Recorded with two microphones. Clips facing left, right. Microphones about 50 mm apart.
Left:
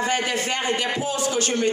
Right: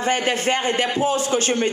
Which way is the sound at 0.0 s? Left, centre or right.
Right.